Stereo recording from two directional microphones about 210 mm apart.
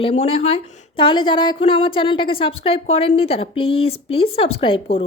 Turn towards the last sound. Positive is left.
turn(degrees=25)  # may be behind; listen again after turning